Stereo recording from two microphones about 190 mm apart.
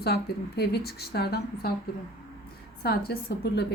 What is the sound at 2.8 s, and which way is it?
Speech, 55° left (ahead or behind).